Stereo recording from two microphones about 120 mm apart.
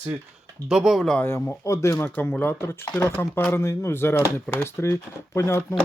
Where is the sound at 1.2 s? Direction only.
20° left (ahead or behind).